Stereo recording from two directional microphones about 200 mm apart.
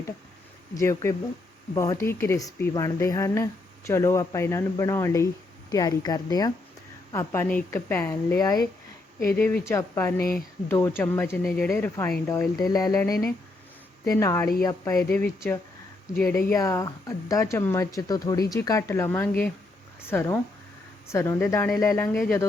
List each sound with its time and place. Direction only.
0.7 s speech: 15° left (ahead or behind)
16.5 s speech: 15° left (ahead or behind)